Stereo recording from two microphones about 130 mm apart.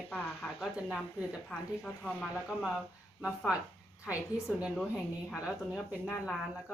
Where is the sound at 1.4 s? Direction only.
15° left (ahead or behind).